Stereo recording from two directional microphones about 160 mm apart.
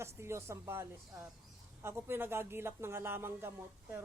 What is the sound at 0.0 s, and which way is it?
Speech, 15° right (ahead or behind).